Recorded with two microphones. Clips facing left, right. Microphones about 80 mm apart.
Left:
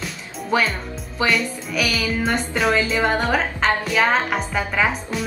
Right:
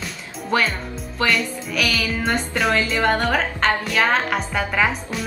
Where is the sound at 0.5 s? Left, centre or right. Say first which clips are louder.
Even; centre.